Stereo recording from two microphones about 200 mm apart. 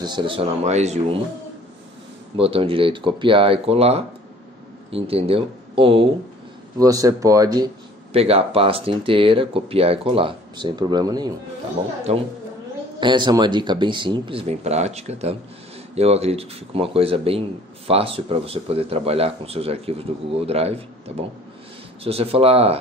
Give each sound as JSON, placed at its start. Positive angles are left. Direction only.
{"t": 0.0, "sound": "speech", "side_deg": -25}
{"t": 2.3, "sound": "speech", "side_deg": -30}
{"t": 6.8, "sound": "speech", "side_deg": -15}
{"t": 12.1, "sound": "speech", "side_deg": -35}
{"t": 13.0, "sound": "speech", "side_deg": -20}
{"t": 22.0, "sound": "speech", "side_deg": -30}